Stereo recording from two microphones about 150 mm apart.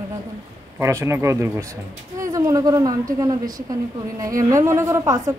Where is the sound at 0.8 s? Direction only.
20° right (ahead or behind).